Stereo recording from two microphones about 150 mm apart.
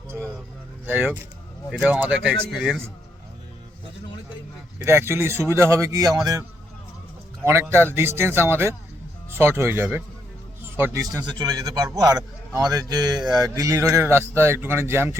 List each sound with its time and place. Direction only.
1.7 s speech: 5° right (ahead or behind)
4.8 s speech: 15° right (ahead or behind)
7.4 s a man's voice: 15° right (ahead or behind)